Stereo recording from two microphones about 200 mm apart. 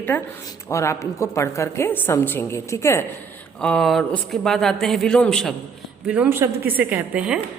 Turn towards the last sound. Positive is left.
turn(degrees=-5)  # may be behind; listen again after turning